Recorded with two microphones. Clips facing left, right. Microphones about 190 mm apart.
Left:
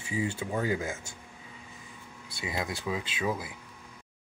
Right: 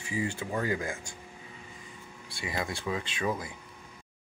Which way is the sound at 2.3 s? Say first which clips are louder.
Left 1 dB; 20° left (ahead or behind).